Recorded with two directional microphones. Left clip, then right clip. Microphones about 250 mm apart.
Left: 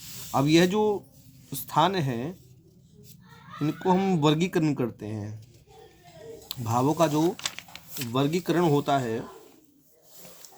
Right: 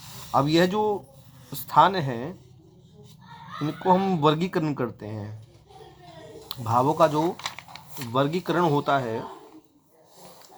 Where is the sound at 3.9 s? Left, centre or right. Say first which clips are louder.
Right 2 dB; left.